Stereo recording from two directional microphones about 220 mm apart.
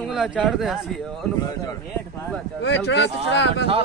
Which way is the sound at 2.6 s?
55° left (ahead or behind).